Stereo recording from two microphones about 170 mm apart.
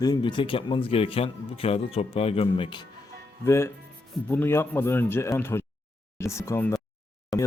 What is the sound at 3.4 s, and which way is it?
Speech, 15° left (ahead or behind).